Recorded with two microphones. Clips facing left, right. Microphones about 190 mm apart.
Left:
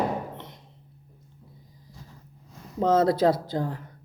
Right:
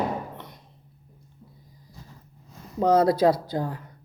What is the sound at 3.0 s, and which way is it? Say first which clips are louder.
Speech: right 1 dB; 25° left (ahead or behind).